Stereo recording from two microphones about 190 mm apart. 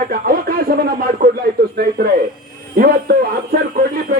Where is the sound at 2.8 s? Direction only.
55° right (ahead or behind).